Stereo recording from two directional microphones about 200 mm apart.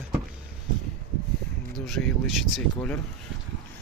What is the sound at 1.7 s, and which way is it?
Speech, centre (ahead or behind).